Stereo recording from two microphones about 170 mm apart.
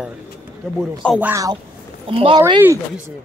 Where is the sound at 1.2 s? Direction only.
15° right (ahead or behind).